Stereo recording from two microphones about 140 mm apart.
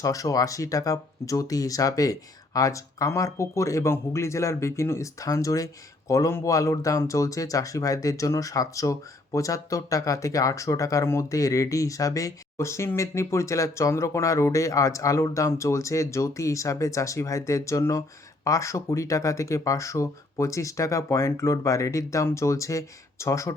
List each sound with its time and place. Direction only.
0.0 s speech: 25° left (ahead or behind)